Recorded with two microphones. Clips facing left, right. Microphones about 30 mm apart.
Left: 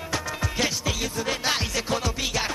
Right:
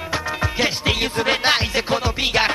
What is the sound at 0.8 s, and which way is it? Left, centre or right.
Music, right.